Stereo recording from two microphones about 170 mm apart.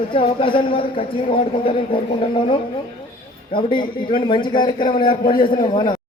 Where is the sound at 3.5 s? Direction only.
30° left (ahead or behind).